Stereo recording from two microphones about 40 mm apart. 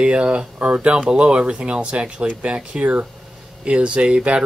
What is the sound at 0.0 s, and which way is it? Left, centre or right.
Speech, right.